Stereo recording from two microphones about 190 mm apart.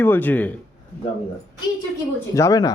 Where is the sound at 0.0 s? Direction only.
10° left (ahead or behind).